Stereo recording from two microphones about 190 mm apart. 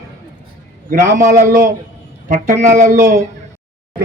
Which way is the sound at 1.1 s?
15° right (ahead or behind).